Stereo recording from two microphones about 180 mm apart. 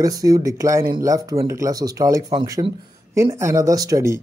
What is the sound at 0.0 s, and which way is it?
Speech, 20° right (ahead or behind).